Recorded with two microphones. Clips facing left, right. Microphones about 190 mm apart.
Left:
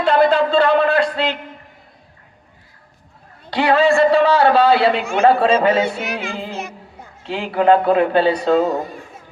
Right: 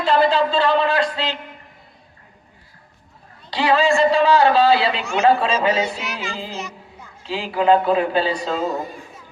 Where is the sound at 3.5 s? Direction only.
55° left (ahead or behind).